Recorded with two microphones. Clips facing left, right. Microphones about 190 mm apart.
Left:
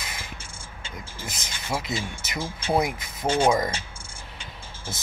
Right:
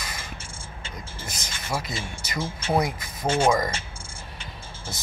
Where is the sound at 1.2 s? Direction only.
20° left (ahead or behind).